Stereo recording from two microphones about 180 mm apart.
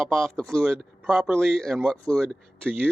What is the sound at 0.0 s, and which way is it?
Speech, centre (ahead or behind).